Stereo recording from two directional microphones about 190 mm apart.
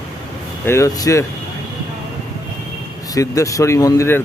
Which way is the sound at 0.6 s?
15° left (ahead or behind).